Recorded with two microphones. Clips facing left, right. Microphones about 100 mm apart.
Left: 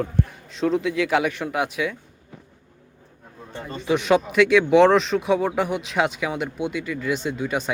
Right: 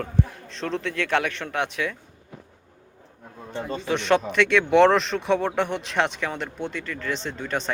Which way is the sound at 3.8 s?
5° left (ahead or behind).